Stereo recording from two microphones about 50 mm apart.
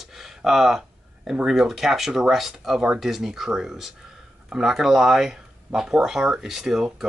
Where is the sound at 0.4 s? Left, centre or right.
Centre.